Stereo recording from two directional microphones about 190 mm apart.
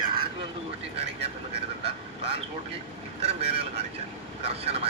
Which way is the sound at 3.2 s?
30° right (ahead or behind).